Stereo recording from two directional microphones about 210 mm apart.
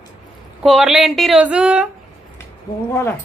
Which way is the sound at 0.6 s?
Centre (ahead or behind).